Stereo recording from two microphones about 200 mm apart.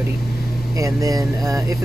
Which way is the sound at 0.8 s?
15° right (ahead or behind).